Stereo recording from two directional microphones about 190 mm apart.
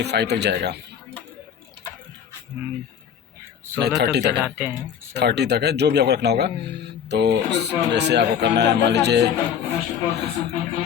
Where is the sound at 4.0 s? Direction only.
60° right (ahead or behind).